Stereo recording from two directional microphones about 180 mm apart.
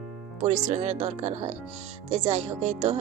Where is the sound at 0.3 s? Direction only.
40° right (ahead or behind).